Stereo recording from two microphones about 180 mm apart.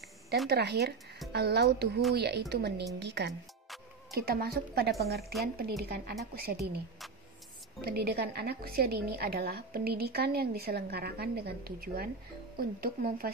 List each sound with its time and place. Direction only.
0.5 s a woman's voice: 65° right (ahead or behind)
4.1 s a woman's voice: 60° right (ahead or behind)
7.8 s a woman's voice: 60° right (ahead or behind)